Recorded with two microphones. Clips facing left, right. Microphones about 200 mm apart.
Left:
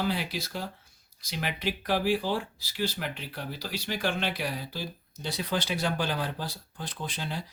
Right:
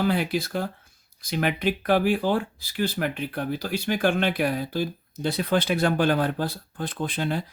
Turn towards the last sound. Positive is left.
turn(degrees=-55)  # may be behind; listen again after turning